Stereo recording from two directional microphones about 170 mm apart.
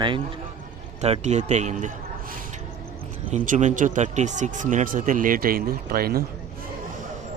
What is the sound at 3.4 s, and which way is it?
Speech, 50° right (ahead or behind).